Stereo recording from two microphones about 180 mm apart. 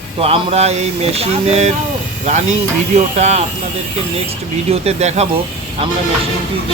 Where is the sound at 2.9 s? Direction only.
40° right (ahead or behind).